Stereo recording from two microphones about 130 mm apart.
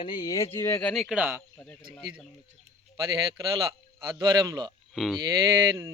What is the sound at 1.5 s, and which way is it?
Speech, 10° left (ahead or behind).